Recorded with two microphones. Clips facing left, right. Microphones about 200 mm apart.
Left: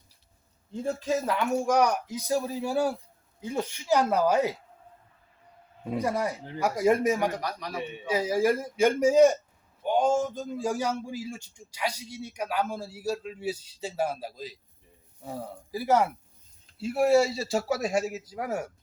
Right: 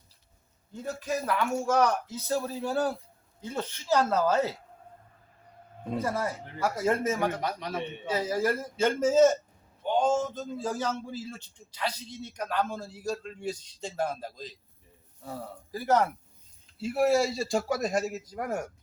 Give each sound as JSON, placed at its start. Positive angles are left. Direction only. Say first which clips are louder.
{"t": 0.7, "sound": "a man's voice", "louder": "left 4 dB", "side_deg": 25}
{"t": 5.9, "sound": "a man's voice", "louder": "left 2 dB", "side_deg": 15}
{"t": 7.4, "sound": "a man's voice", "louder": "right 2 dB", "side_deg": -25}
{"t": 7.8, "sound": "a man's voice", "louder": "left 4 dB", "side_deg": 10}